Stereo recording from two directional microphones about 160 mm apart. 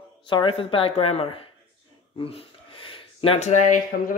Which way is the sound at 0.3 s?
30° left (ahead or behind).